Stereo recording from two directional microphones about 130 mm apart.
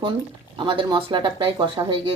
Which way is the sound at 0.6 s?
40° right (ahead or behind).